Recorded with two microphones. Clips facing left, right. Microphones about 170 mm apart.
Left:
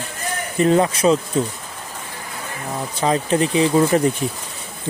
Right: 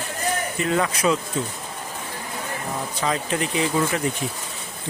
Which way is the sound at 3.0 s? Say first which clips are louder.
Left 7 dB; 30° left (ahead or behind).